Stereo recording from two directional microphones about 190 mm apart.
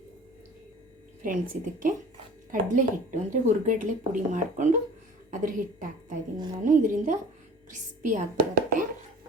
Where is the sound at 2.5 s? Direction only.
45° right (ahead or behind).